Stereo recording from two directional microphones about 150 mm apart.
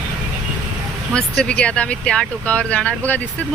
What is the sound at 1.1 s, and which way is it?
Speech, 5° left (ahead or behind).